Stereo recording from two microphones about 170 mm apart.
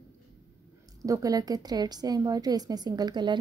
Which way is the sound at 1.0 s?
20° right (ahead or behind).